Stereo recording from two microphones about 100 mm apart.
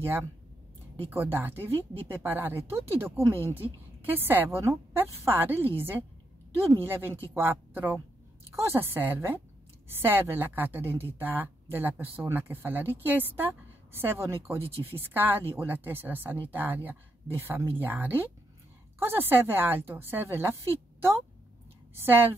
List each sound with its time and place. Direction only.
0.0 s a woman's voice: 25° right (ahead or behind)
21.9 s a woman's voice: 20° right (ahead or behind)